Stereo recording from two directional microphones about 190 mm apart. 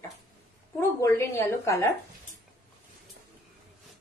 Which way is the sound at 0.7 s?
15° left (ahead or behind).